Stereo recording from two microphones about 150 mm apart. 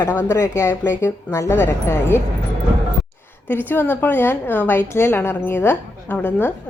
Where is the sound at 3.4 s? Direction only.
15° left (ahead or behind).